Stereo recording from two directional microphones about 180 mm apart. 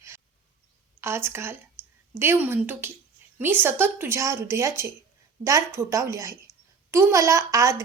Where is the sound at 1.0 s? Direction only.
15° right (ahead or behind).